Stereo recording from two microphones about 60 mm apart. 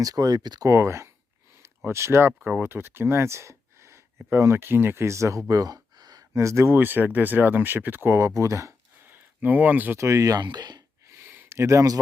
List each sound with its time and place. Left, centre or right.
0.0 s speech: right
0.8 s speech: right
5.5 s a sound: right
6.7 s speech: right
8.3 s speech: right
9.0 s speech: right
10.0 s speech: right
11.0 s a sound: right